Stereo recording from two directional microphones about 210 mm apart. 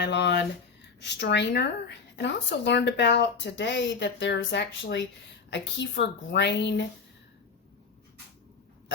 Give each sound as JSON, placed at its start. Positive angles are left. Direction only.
{"t": 0.0, "sound": "speech", "side_deg": 55}